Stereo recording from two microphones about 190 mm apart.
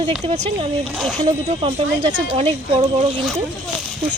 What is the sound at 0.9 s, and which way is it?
Speech, 5° right (ahead or behind).